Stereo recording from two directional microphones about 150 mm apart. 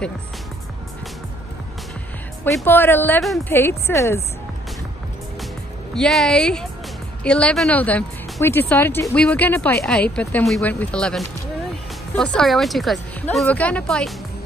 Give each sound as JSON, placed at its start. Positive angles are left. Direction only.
{"t": 2.4, "sound": "speech", "side_deg": 15}
{"t": 5.9, "sound": "speech", "side_deg": 5}